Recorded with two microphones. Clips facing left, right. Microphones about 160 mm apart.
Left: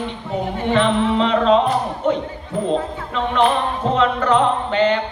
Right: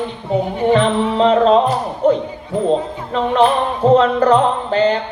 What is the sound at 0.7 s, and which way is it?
Speech, 35° right (ahead or behind).